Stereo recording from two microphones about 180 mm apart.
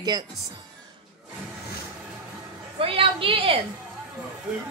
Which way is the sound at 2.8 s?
30° right (ahead or behind).